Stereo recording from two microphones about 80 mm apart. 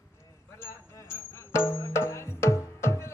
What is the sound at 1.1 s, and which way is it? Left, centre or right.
Music, left.